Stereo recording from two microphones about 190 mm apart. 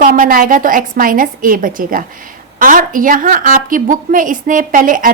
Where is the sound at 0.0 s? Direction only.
45° right (ahead or behind).